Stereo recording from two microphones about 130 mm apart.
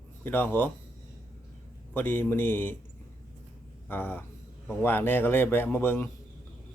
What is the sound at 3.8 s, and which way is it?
Speech, 15° left (ahead or behind).